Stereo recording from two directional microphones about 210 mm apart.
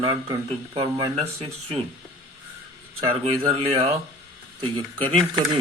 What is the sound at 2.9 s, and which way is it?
Speech, 25° right (ahead or behind).